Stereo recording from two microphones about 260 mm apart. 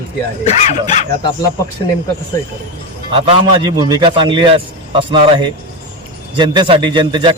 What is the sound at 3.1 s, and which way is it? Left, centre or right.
A man's voice, centre.